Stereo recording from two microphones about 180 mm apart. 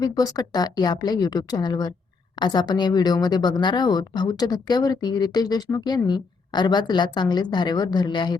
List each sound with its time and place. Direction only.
0.0 s a woman's voice: 20° left (ahead or behind)